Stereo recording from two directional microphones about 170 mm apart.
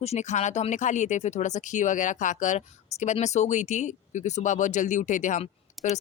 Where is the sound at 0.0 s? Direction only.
40° left (ahead or behind).